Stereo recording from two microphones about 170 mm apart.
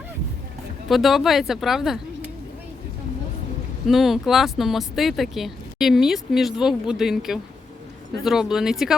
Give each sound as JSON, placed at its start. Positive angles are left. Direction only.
{"t": 0.9, "sound": "speech", "side_deg": 0}
{"t": 3.8, "sound": "speech", "side_deg": 0}